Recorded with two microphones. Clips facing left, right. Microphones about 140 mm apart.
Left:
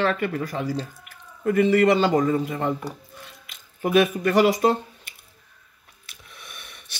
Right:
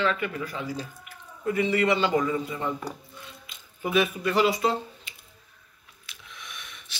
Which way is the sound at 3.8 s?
55° left (ahead or behind).